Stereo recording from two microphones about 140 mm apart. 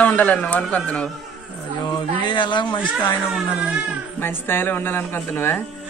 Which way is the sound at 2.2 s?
35° left (ahead or behind).